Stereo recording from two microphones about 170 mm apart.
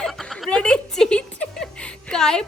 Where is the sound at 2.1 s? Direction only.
5° left (ahead or behind).